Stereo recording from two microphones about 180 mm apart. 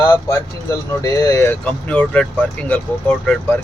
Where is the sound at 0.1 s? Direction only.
15° left (ahead or behind).